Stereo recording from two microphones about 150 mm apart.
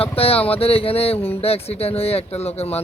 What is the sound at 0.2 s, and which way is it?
Speech, 40° left (ahead or behind).